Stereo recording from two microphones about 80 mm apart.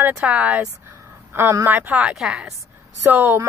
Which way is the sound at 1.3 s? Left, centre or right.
Right.